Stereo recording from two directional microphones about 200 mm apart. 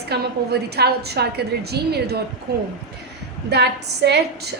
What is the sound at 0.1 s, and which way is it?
A woman's voice, 55° right (ahead or behind).